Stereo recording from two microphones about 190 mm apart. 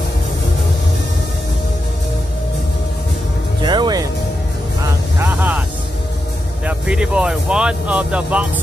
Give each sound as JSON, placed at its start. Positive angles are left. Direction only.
{"t": 3.6, "sound": "music", "side_deg": -25}
{"t": 4.8, "sound": "vehicle", "side_deg": -10}
{"t": 6.6, "sound": "speech", "side_deg": -5}